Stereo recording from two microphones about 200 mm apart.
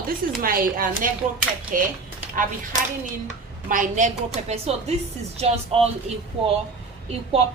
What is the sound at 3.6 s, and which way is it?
A woman's voice, 40° right (ahead or behind).